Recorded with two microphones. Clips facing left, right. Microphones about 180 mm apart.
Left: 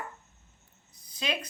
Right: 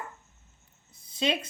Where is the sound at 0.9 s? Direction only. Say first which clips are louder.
Right 6 dB; 25° right (ahead or behind).